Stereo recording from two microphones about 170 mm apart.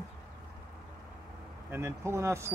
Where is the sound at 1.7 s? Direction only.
15° right (ahead or behind).